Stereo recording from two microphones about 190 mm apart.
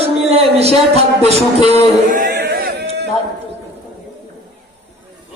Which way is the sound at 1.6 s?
40° right (ahead or behind).